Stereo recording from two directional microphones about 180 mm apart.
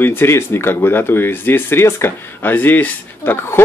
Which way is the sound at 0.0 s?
10° left (ahead or behind).